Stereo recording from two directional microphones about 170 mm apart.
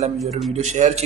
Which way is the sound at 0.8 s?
45° right (ahead or behind).